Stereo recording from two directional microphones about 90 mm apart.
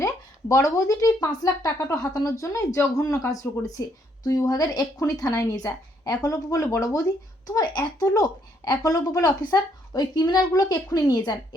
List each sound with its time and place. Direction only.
0.0 s speech: 35° left (ahead or behind)